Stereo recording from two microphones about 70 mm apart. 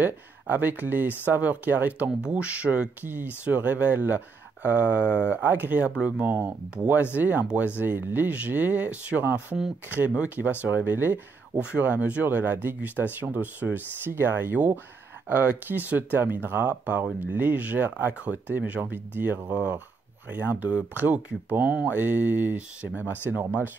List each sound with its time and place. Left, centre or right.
0.0 s speech: right
5.1 s speech: left
5.4 s speech: right
22.0 s speech: right